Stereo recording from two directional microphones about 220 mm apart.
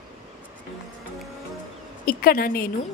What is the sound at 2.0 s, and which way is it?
Speech, 40° left (ahead or behind).